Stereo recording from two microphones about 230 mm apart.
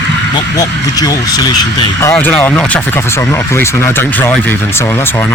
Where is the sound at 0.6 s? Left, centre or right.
Centre.